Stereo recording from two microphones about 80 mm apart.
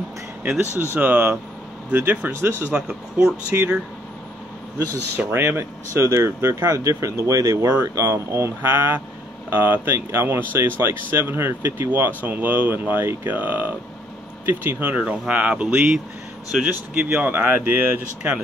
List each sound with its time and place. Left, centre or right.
0.4 s speech: right
4.7 s speech: right
6.5 s speech: right; by 18.4 s centre